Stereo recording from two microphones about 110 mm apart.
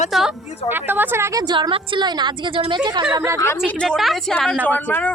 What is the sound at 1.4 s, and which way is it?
A woman's voice, 45° right (ahead or behind).